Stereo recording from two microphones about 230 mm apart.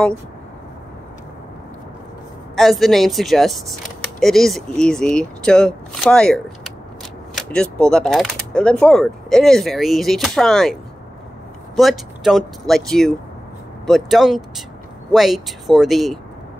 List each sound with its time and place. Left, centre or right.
2.5 s speech: centre
7.8 s speech: centre